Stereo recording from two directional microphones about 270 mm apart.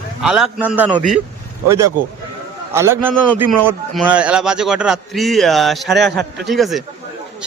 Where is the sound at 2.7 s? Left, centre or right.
Centre.